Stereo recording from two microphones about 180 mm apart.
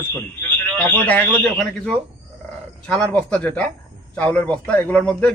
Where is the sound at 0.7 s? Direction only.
10° left (ahead or behind).